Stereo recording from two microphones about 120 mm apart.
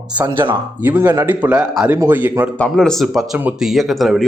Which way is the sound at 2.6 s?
5° left (ahead or behind).